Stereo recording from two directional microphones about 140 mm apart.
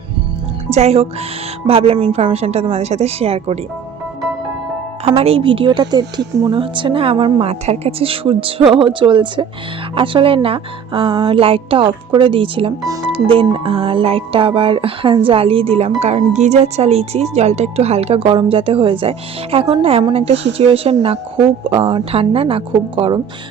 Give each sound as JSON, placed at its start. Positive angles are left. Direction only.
{"t": 0.7, "sound": "speech", "side_deg": -50}
{"t": 5.0, "sound": "speech", "side_deg": -45}
{"t": 7.6, "sound": "speech", "side_deg": -50}